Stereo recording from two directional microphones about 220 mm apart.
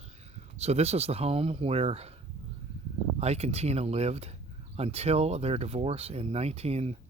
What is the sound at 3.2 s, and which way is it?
Speech, 30° right (ahead or behind).